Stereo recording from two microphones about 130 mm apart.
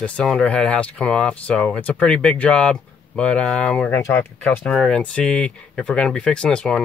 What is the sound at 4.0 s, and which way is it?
Speech, 25° left (ahead or behind).